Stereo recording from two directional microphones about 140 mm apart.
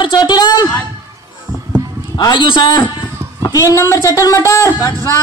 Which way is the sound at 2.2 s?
35° left (ahead or behind).